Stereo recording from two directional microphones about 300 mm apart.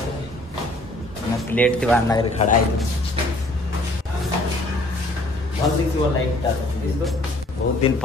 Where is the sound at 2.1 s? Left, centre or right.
Left.